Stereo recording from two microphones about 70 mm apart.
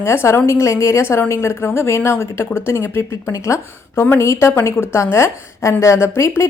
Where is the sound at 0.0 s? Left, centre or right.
Left.